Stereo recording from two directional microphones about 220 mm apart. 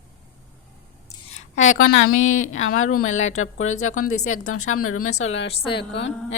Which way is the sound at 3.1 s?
65° left (ahead or behind).